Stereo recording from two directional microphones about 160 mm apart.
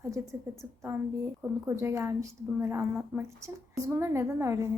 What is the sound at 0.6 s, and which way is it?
A woman's voice, 15° right (ahead or behind).